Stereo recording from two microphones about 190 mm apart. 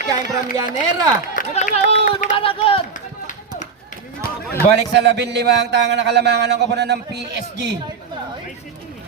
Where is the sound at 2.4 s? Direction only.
30° left (ahead or behind).